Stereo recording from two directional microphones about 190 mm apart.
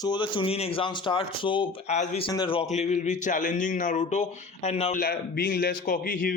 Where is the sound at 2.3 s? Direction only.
25° left (ahead or behind).